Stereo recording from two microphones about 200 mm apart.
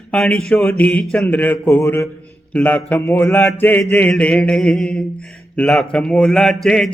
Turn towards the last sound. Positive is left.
turn(degrees=0)  # may be behind; listen again after turning